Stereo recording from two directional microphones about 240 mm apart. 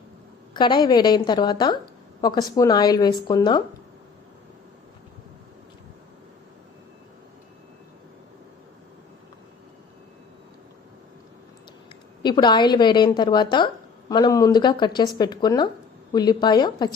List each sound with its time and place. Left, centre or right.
0.5 s speech: centre
12.2 s speech: centre